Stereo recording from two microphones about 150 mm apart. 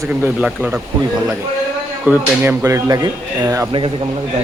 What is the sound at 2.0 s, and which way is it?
Speech, 15° right (ahead or behind).